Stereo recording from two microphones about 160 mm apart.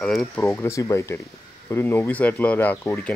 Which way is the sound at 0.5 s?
20° left (ahead or behind).